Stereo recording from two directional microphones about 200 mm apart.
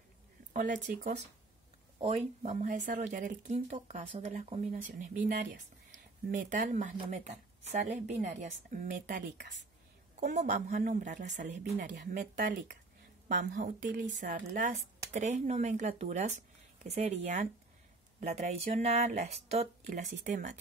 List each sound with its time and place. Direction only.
0.5 s speech: 40° right (ahead or behind)
10.2 s speech: 35° right (ahead or behind)